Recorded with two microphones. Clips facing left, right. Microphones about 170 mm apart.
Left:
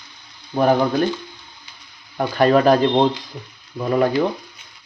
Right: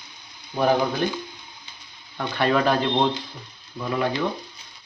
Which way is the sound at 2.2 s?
40° left (ahead or behind).